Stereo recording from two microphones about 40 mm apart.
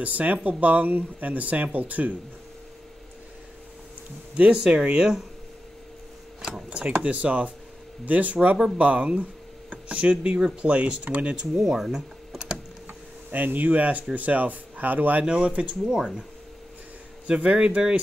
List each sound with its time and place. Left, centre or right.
0.0 s speech: right
4.6 s speech: right
7.0 s speech: right
11.6 s speech: centre
11.9 s computer keyboard: centre
13.3 s speech: right
13.7 s speech: right
15.2 s speech: right
17.3 s speech: right